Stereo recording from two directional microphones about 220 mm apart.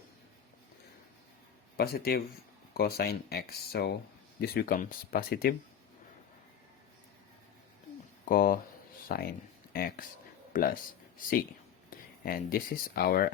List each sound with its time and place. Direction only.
1.7 s speech: 45° left (ahead or behind)
8.2 s speech: 40° left (ahead or behind)
11.9 s speech: 40° left (ahead or behind)